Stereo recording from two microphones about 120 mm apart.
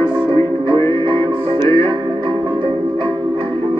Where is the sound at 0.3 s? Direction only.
45° right (ahead or behind).